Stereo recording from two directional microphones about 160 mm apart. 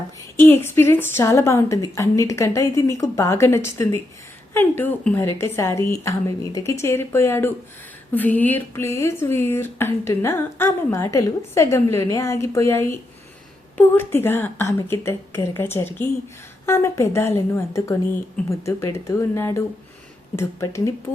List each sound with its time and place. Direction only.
0.4 s speech: 15° left (ahead or behind)